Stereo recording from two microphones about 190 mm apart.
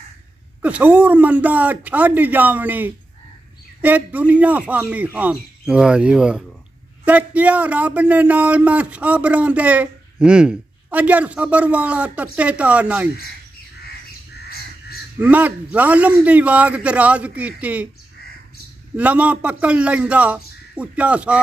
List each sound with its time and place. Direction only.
0.6 s speech: 5° right (ahead or behind)
14.5 s crow: 55° left (ahead or behind)
15.2 s speech: 10° right (ahead or behind)
18.9 s speech: 5° right (ahead or behind)